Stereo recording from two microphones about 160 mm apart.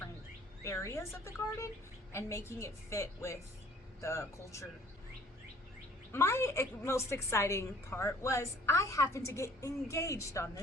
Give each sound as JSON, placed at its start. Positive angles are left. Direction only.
{"t": 0.6, "sound": "a woman's voice", "side_deg": 15}
{"t": 6.1, "sound": "a woman's voice", "side_deg": 15}